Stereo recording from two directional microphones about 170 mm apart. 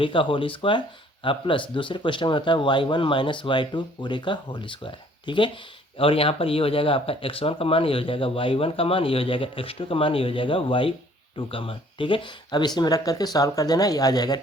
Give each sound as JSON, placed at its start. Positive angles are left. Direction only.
{"t": 0.0, "sound": "speech", "side_deg": 30}